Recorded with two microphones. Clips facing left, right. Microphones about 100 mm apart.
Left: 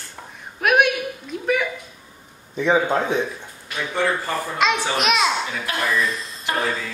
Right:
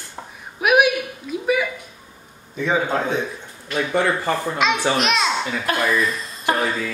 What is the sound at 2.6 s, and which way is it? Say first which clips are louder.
Speech: left 2 dB; 15° left (ahead or behind).